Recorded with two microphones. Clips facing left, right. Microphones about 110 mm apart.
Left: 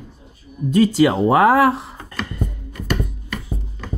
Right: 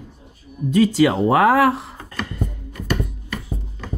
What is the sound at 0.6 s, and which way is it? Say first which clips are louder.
Speech: left 1 dB; 35° left (ahead or behind).